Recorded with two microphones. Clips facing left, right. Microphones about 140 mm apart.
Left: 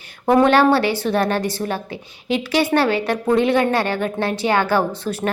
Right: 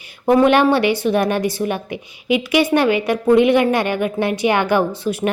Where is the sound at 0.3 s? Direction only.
10° right (ahead or behind).